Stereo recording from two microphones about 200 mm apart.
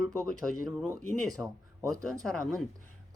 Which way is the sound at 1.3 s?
15° right (ahead or behind).